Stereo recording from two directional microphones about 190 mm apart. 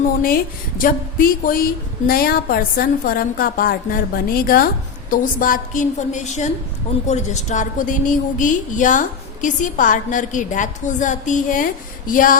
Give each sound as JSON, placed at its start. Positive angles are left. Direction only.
{"t": 0.8, "sound": "a woman's voice", "side_deg": 45}